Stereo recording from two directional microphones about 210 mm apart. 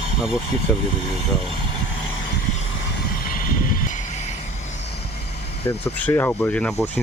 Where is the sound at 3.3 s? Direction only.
45° left (ahead or behind).